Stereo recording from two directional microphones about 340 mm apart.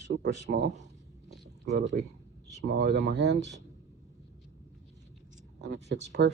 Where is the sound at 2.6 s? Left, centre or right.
Right.